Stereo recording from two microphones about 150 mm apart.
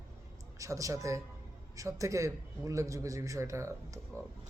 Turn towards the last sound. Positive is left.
turn(degrees=-20)  # may be behind; listen again after turning